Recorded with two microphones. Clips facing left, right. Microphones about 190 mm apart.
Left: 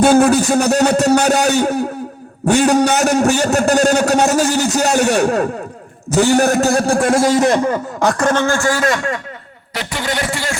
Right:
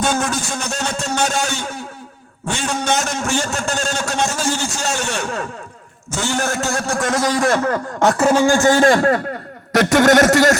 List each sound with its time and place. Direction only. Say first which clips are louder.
0.0 s a man's voice: left 10 dB; 35° left (ahead or behind); by 7.8 s 15° left (ahead or behind)
7.9 s a man's voice: right 3 dB; centre (ahead or behind); by 10.6 s 45° right (ahead or behind)